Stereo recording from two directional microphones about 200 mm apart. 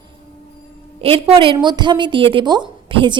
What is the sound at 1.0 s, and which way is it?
A woman's voice, 30° right (ahead or behind).